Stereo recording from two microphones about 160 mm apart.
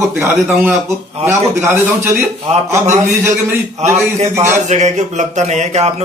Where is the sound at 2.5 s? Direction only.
45° right (ahead or behind).